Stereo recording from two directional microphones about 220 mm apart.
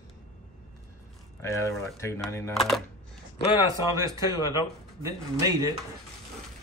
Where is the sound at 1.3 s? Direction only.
15° left (ahead or behind).